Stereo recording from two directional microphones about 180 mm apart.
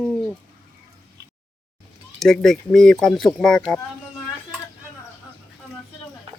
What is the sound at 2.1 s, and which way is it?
Speech, centre (ahead or behind).